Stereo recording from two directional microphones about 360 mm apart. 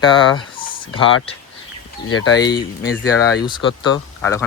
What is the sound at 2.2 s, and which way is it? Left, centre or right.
Speech, left.